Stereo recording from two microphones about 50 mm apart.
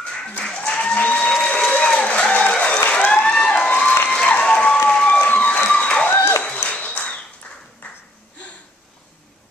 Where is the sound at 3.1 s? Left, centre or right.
Centre.